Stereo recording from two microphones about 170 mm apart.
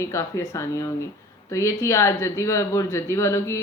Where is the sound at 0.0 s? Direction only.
15° left (ahead or behind).